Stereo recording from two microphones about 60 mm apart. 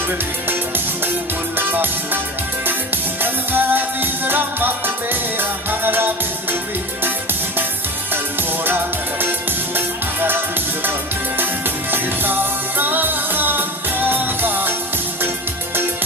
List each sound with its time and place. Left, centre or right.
1.5 s music: right
8.6 s music: right
11.3 s music: right